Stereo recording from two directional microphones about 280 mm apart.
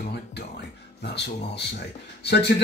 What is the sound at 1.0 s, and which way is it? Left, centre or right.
Speech, left.